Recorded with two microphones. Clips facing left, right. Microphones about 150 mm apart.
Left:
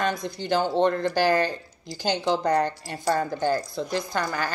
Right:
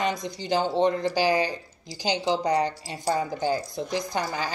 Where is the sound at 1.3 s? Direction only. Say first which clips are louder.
Left 1 dB; 15° right (ahead or behind).